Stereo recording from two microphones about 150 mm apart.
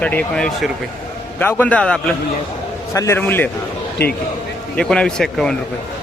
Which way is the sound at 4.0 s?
90° left.